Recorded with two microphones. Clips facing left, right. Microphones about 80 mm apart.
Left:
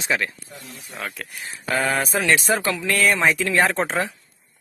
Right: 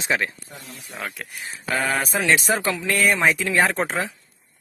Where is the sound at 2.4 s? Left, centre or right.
Right.